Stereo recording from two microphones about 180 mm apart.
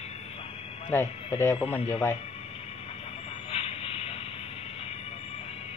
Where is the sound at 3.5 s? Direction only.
30° left (ahead or behind).